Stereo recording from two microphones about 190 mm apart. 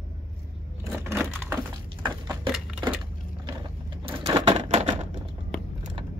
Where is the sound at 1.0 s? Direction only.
10° right (ahead or behind).